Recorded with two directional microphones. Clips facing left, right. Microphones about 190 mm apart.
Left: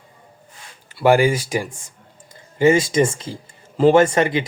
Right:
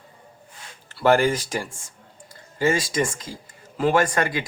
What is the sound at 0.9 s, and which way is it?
Speech, 10° left (ahead or behind).